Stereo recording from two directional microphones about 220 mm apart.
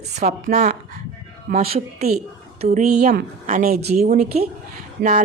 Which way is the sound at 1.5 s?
45° right (ahead or behind).